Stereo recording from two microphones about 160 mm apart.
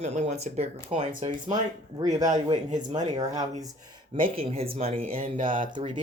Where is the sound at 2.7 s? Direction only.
50° right (ahead or behind).